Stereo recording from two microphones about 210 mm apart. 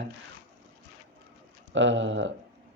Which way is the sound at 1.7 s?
60° right (ahead or behind).